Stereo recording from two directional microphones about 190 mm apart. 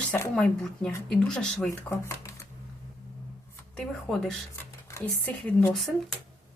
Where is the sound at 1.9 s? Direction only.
15° left (ahead or behind).